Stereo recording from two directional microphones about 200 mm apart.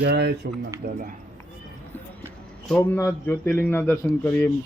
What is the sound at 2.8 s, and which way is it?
Speech, 15° left (ahead or behind).